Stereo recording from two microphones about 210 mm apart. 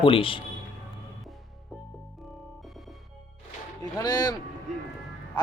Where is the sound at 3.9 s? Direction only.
20° left (ahead or behind).